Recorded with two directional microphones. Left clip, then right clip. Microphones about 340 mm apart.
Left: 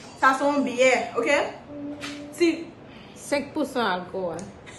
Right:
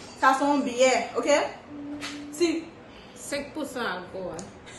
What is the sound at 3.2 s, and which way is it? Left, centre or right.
Speech, centre.